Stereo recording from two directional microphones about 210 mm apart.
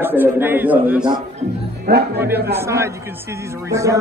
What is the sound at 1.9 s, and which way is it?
Speech, 50° right (ahead or behind).